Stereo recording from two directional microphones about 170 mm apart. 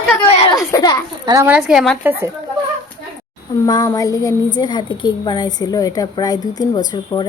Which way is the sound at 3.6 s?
20° left (ahead or behind).